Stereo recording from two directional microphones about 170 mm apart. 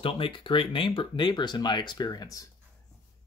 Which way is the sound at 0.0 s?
30° left (ahead or behind).